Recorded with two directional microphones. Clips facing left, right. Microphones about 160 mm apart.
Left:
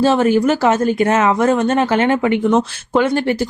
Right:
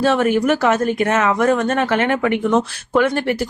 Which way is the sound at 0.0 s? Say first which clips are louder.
Left 3 dB; 30° left (ahead or behind).